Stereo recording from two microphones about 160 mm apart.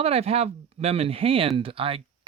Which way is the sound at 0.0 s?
40° right (ahead or behind).